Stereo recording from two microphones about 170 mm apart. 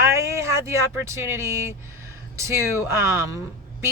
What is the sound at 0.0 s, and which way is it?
Speech, 15° right (ahead or behind).